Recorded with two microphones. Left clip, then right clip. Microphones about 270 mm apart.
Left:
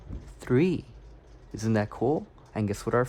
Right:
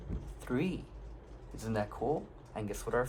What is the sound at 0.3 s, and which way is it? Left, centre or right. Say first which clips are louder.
Speech: left 11 dB; left.